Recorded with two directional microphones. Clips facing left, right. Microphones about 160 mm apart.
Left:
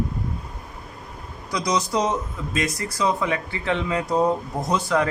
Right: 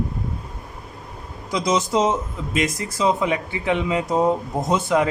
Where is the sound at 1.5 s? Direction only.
25° right (ahead or behind).